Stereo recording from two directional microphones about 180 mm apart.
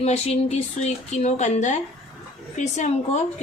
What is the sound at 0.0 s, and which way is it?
Speech, 35° left (ahead or behind).